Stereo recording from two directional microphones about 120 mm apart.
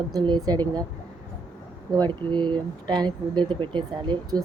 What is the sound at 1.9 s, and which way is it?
Speech, 40° right (ahead or behind).